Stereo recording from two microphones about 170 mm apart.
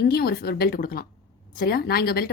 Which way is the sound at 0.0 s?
65° left (ahead or behind).